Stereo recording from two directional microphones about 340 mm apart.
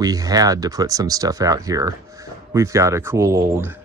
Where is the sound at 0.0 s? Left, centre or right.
Centre.